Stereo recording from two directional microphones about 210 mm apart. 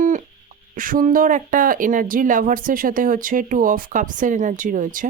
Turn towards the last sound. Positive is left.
turn(degrees=-40)  # may be behind; listen again after turning